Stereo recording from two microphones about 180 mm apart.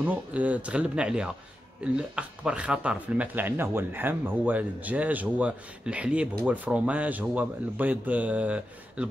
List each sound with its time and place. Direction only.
0.0 s speech: 10° right (ahead or behind)